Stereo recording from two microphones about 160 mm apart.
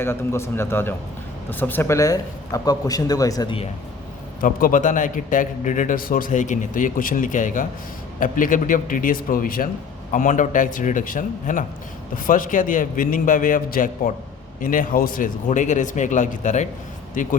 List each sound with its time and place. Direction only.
0.0 s a man's voice: 15° left (ahead or behind); by 3.7 s 30° left (ahead or behind)
4.4 s a man's voice: 55° left (ahead or behind)